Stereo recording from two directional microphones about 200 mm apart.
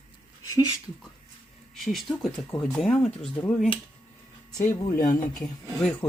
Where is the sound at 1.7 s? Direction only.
Centre (ahead or behind).